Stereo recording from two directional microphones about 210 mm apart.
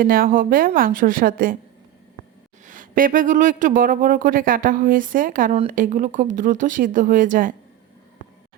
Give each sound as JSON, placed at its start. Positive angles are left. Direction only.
{"t": 0.0, "sound": "speech", "side_deg": -45}
{"t": 2.6, "sound": "speech", "side_deg": -40}